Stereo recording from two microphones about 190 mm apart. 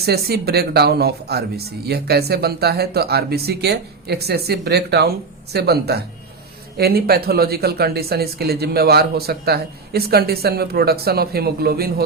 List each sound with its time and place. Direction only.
0.0 s speech: 55° right (ahead or behind)